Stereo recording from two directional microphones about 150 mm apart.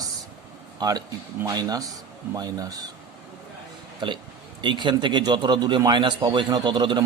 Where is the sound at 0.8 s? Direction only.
25° right (ahead or behind).